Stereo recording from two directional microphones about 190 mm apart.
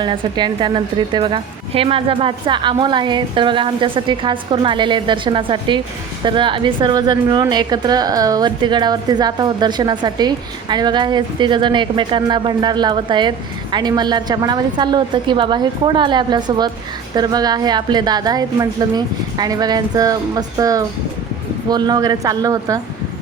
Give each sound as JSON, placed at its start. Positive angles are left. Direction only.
{"t": 0.0, "sound": "a woman's voice", "side_deg": -25}